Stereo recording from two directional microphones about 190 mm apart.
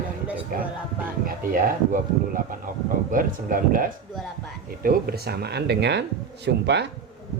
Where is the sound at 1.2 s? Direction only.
45° right (ahead or behind).